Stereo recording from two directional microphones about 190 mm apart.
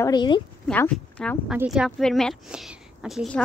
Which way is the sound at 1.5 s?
5° right (ahead or behind).